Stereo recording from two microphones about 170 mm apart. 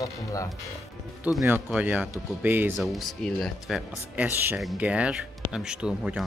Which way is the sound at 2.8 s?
Centre (ahead or behind).